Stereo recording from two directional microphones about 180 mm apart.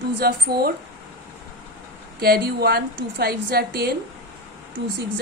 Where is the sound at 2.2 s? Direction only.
60° right (ahead or behind).